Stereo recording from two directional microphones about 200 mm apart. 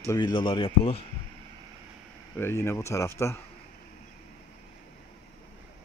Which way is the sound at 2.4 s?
10° left (ahead or behind).